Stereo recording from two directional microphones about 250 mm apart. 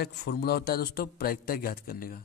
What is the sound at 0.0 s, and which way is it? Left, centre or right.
A man's voice, left.